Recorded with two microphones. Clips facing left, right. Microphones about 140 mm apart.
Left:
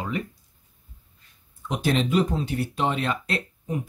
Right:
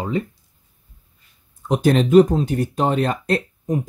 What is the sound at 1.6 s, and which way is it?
Speech, 45° right (ahead or behind).